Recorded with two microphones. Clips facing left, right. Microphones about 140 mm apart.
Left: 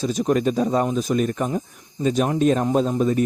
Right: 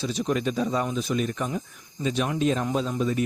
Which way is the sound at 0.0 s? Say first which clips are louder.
Left 6 dB; 45° left (ahead or behind).